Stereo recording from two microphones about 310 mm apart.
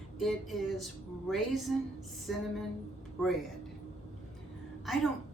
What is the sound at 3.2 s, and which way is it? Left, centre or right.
Speech, centre.